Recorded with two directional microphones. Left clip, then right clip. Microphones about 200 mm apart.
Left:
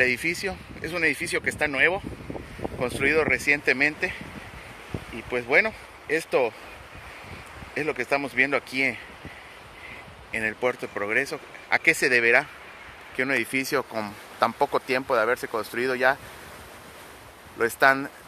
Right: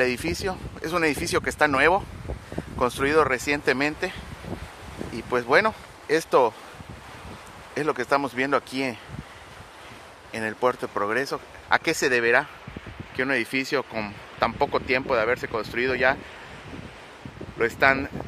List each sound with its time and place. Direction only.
0.0 s speech: 10° right (ahead or behind)
5.1 s speech: 20° right (ahead or behind)
8.1 s speech: 15° right (ahead or behind)
10.3 s speech: 10° right (ahead or behind)
17.6 s speech: centre (ahead or behind)